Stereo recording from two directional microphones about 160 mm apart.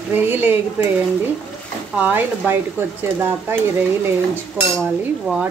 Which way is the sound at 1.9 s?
10° right (ahead or behind).